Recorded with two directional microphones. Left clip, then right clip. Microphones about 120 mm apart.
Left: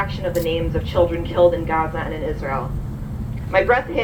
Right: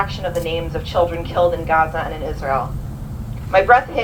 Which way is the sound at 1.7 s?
50° right (ahead or behind).